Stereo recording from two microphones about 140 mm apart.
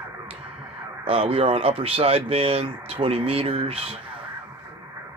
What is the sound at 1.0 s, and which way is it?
Speech, 45° right (ahead or behind).